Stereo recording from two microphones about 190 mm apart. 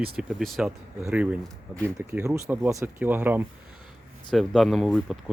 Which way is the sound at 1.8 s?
10° right (ahead or behind).